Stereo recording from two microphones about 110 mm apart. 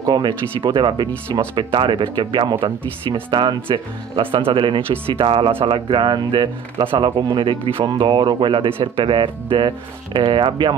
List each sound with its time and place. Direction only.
0.0 s speech: 45° right (ahead or behind)